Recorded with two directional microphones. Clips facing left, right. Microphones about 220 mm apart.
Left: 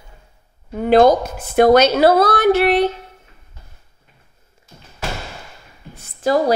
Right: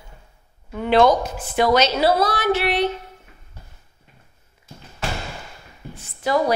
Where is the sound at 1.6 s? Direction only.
55° left (ahead or behind).